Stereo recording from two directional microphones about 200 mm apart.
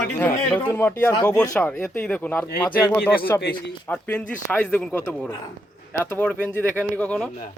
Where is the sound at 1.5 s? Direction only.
5° left (ahead or behind).